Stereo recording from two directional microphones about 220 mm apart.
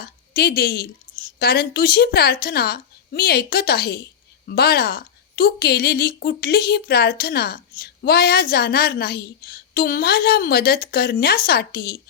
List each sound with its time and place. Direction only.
0.0 s a woman's voice: 45° left (ahead or behind)